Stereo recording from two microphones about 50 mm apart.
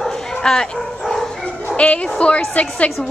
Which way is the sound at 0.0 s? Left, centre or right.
Centre.